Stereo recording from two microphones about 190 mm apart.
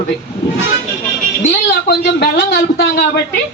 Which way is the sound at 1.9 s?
60° left (ahead or behind).